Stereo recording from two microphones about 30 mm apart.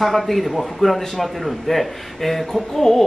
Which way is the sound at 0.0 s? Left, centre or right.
Centre.